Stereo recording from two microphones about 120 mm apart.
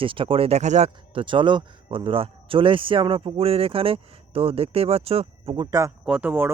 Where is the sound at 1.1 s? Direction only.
45° right (ahead or behind).